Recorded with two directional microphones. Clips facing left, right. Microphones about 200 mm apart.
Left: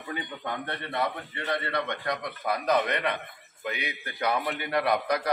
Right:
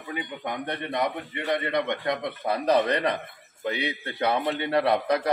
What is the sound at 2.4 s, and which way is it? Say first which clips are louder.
A man's voice: right 3 dB; 30° right (ahead or behind).